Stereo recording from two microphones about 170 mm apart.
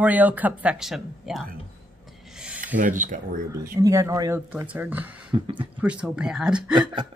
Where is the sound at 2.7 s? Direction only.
50° right (ahead or behind).